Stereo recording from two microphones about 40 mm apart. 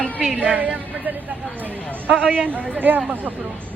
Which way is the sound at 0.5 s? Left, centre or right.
Right.